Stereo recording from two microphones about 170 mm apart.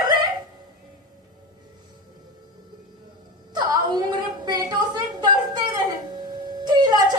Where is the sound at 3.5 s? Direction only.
25° right (ahead or behind).